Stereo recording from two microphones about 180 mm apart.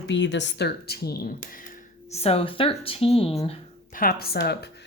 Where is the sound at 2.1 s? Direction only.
35° left (ahead or behind).